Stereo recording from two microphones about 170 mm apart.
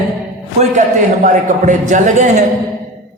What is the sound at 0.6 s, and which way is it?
A man's voice, 50° right (ahead or behind).